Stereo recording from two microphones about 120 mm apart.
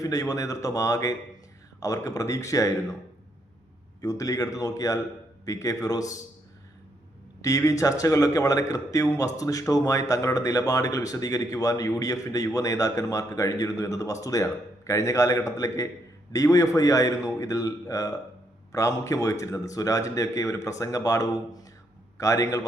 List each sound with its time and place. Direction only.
0.0 s a man's voice: 30° left (ahead or behind)
4.0 s a man's voice: 30° left (ahead or behind)
7.4 s a man's voice: 30° left (ahead or behind)